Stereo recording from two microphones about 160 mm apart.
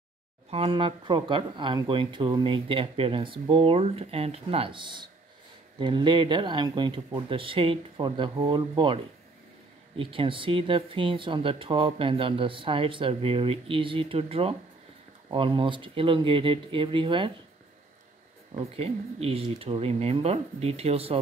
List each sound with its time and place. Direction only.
0.5 s speech: 35° right (ahead or behind)
18.5 s speech: 40° right (ahead or behind)